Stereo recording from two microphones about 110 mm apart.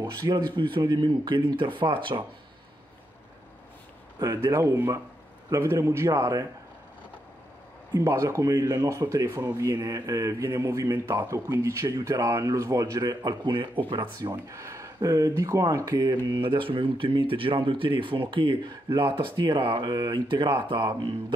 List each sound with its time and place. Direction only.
0.2 s a man's voice: 35° right (ahead or behind)
0.6 s speech: 45° right (ahead or behind)
4.2 s speech: 30° right (ahead or behind)
7.9 s a man's voice: 30° right (ahead or behind); by 14.0 s 50° right (ahead or behind)
14.2 s speech: 25° right (ahead or behind)
16.3 s speech: 50° right (ahead or behind)